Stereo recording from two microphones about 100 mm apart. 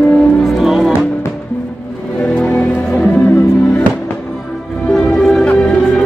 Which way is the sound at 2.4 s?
10° left (ahead or behind).